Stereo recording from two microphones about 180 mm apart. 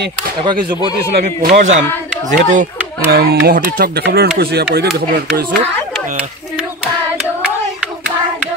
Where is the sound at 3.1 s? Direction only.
65° right (ahead or behind).